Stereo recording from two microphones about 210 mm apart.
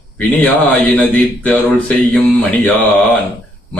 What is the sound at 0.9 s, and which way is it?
Mantra, 5° left (ahead or behind).